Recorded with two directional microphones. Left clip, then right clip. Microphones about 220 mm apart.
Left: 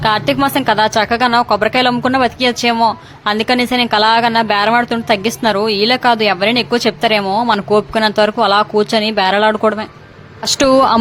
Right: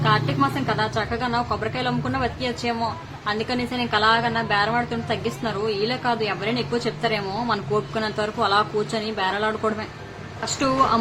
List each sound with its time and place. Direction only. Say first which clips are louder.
0.0 s speech: left 8 dB; 50° left (ahead or behind)